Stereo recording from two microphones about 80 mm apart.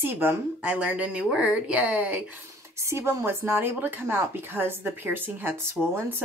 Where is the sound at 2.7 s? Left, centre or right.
Right.